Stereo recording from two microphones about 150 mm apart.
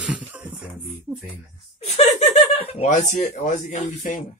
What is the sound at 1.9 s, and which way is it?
Speech, 45° left (ahead or behind).